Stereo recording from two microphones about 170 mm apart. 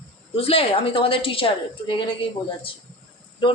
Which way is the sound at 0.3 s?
35° left (ahead or behind).